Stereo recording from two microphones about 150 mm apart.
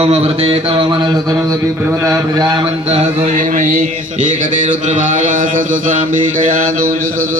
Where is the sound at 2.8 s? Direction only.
40° right (ahead or behind).